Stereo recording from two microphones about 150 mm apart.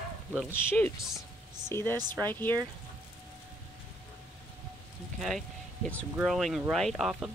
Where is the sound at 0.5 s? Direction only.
15° left (ahead or behind).